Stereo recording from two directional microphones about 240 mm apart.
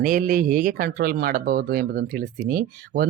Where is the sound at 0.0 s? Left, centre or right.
Right.